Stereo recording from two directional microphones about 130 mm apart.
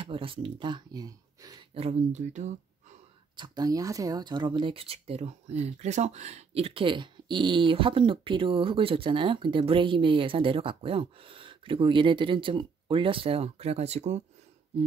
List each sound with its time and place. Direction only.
0.0 s speech: 40° right (ahead or behind)
1.7 s speech: 50° right (ahead or behind)
3.3 s speech: 35° right (ahead or behind); by 14.2 s 60° right (ahead or behind)